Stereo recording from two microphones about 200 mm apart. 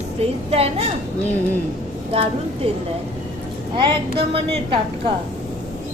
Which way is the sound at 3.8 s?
25° right (ahead or behind).